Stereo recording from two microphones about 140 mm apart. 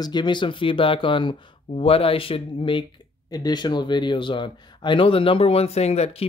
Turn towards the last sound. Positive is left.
turn(degrees=50)  # may be behind; listen again after turning